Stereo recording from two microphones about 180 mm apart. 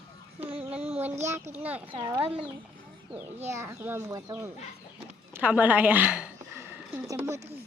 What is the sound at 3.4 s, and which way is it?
Speech, 15° right (ahead or behind).